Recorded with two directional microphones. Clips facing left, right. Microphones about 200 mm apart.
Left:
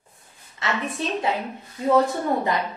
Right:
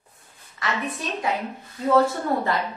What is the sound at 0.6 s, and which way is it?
Speech, 25° left (ahead or behind).